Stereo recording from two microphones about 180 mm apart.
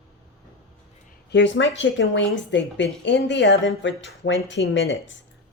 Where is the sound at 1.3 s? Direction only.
90° left.